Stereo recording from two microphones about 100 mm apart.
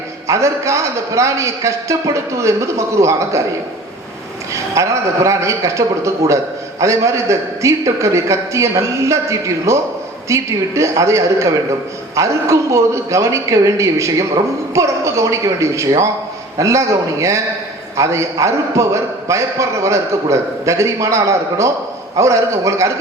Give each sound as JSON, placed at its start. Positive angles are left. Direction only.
{"t": 0.3, "sound": "a man's voice", "side_deg": -30}
{"t": 4.5, "sound": "a man's voice", "side_deg": -30}